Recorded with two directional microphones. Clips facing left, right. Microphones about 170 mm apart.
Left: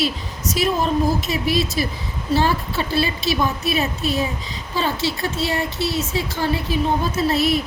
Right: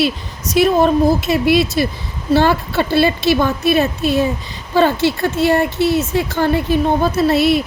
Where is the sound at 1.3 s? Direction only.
65° right (ahead or behind).